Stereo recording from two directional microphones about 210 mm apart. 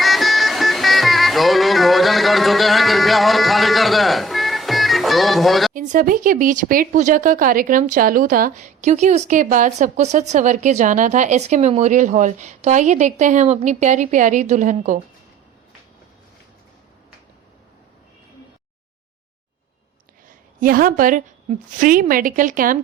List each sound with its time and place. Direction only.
0.0 s music: centre (ahead or behind)
5.7 s speech: 40° right (ahead or behind)
20.6 s speech: 40° right (ahead or behind)